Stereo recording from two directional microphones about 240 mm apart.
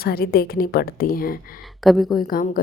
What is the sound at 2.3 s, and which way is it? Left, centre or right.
Speech, left.